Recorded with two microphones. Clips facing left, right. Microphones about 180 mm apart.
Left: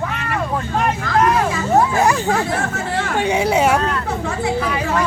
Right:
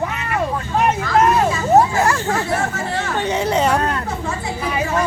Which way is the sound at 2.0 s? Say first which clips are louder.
Left 2 dB; 15° left (ahead or behind).